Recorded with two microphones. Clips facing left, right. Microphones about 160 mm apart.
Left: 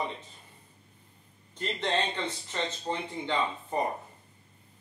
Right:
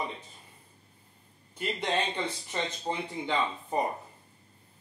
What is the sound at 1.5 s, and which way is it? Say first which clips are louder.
Speech: even; 10° right (ahead or behind).